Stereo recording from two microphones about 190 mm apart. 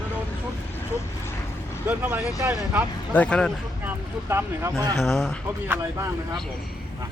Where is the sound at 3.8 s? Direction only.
15° right (ahead or behind).